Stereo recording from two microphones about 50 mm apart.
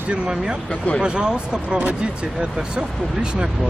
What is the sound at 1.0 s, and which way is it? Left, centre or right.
Speech, centre.